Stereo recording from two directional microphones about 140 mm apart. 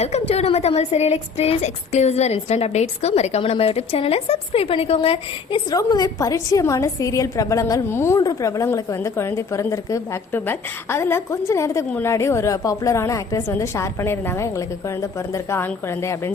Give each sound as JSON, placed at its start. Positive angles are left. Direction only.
{"t": 0.0, "sound": "a woman's voice", "side_deg": 50}